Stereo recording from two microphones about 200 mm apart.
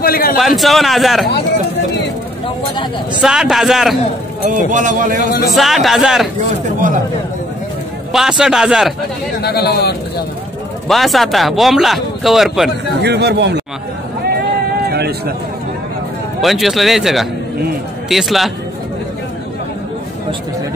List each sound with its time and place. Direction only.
0.0 s a man's voice: 45° left (ahead or behind)
0.4 s speech: centre (ahead or behind)
3.2 s speech: 5° right (ahead or behind)
4.6 s a man's voice: 40° right (ahead or behind)
5.5 s speech: centre (ahead or behind)
8.1 s speech: centre (ahead or behind)
9.4 s speech: 55° left (ahead or behind)
10.9 s speech: centre (ahead or behind)
13.0 s speech: 55° right (ahead or behind)
14.9 s a sound: 50° right (ahead or behind)
16.3 s speech: centre (ahead or behind)